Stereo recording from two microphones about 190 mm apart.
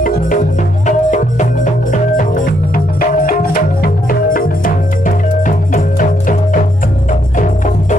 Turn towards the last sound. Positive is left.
turn(degrees=40)  # may be behind; listen again after turning